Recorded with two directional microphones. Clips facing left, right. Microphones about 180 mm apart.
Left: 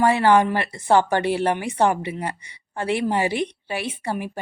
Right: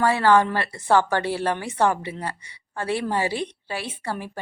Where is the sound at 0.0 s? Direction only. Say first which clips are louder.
Left 2 dB; 20° left (ahead or behind).